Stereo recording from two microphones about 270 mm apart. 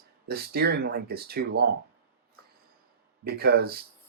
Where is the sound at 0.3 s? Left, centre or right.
Right.